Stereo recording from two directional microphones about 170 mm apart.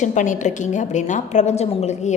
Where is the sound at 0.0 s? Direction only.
45° left (ahead or behind).